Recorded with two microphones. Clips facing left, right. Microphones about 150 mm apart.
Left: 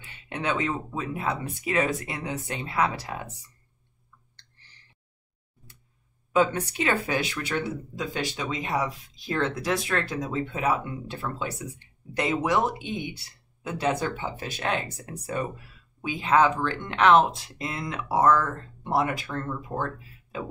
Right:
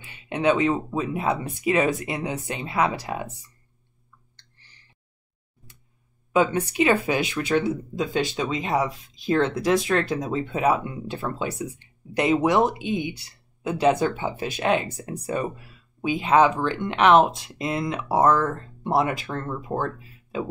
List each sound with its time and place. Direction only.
0.3 s speech: 15° right (ahead or behind)
6.3 s speech: 15° right (ahead or behind)
16.0 s speech: 20° right (ahead or behind)